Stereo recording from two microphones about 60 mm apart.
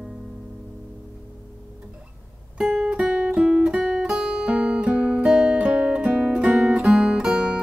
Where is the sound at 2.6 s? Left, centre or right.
Centre.